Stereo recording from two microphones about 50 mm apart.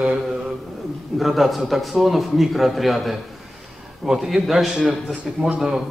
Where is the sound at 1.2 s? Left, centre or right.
Centre.